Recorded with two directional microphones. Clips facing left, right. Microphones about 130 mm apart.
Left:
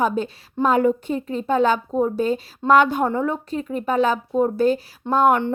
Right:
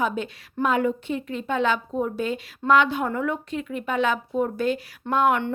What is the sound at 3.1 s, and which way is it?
A woman's voice, 30° left (ahead or behind).